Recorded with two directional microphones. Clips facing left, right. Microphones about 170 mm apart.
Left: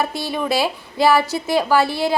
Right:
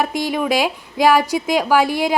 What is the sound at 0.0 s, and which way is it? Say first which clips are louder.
A woman's voice: right 3 dB; 15° right (ahead or behind).